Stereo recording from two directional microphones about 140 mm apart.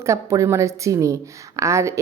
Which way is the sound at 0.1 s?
20° right (ahead or behind).